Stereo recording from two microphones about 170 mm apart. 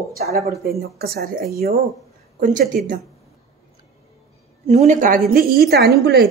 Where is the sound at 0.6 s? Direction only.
65° right (ahead or behind).